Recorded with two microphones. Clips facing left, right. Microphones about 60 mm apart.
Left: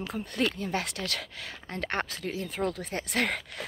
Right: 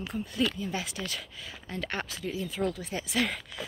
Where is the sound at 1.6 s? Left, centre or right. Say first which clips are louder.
Left 3 dB; left.